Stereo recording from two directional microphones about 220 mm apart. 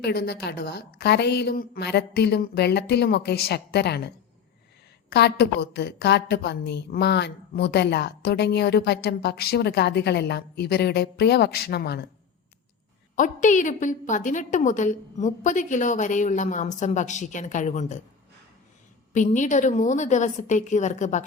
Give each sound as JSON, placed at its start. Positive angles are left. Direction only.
{"t": 0.0, "sound": "a woman's voice", "side_deg": 50}
{"t": 5.1, "sound": "a woman's voice", "side_deg": 50}
{"t": 13.1, "sound": "a woman's voice", "side_deg": 35}
{"t": 19.1, "sound": "a woman's voice", "side_deg": 35}